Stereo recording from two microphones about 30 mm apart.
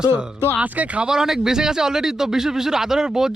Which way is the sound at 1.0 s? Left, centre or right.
Centre.